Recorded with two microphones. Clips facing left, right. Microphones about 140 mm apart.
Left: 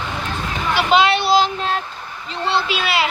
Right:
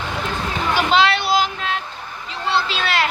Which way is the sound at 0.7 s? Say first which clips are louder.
Left 2 dB; 10° left (ahead or behind).